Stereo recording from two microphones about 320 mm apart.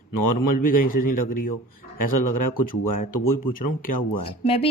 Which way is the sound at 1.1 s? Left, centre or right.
Left.